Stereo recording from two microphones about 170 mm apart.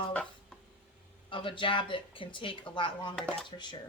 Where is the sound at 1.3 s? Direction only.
30° left (ahead or behind).